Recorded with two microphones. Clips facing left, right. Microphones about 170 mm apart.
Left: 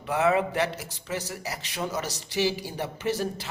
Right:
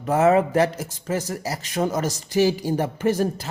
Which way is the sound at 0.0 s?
45° right (ahead or behind).